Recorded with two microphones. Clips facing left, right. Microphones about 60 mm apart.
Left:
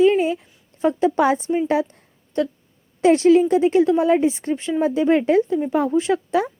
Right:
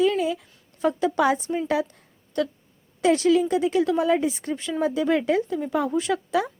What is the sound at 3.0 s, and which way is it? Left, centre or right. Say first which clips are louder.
A woman's voice: left 5 dB; left.